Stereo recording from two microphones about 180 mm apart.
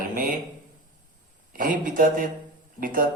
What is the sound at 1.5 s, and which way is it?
Speech, 50° right (ahead or behind).